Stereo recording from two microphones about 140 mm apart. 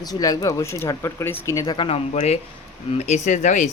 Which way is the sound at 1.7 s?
35° left (ahead or behind).